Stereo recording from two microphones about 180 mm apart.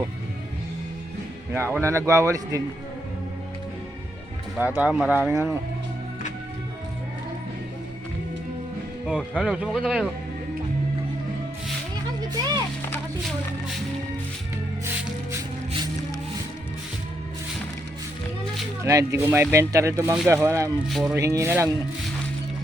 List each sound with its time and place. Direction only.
1.5 s speech: 10° right (ahead or behind)
4.5 s speech: 10° right (ahead or behind)
9.0 s speech: 5° right (ahead or behind)
18.9 s speech: 15° right (ahead or behind)
21.2 s speech: 15° right (ahead or behind)